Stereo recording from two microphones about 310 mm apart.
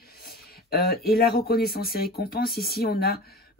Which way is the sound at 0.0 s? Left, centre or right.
Left.